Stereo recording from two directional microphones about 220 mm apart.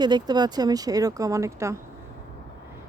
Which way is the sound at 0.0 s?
20° right (ahead or behind).